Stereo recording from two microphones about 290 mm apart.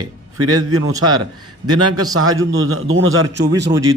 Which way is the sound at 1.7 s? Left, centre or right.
Right.